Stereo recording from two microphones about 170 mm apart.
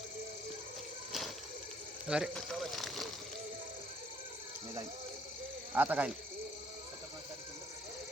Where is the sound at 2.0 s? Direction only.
5° right (ahead or behind).